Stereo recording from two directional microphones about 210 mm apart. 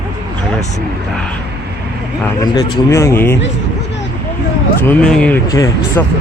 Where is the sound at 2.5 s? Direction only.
15° left (ahead or behind).